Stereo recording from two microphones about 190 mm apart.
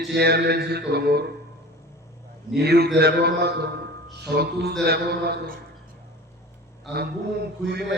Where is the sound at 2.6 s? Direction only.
60° right (ahead or behind).